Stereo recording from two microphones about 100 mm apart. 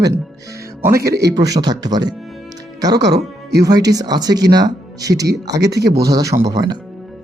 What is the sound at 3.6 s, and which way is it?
Speech, 40° right (ahead or behind).